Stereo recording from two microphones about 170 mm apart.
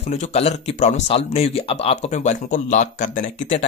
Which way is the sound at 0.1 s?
40° left (ahead or behind).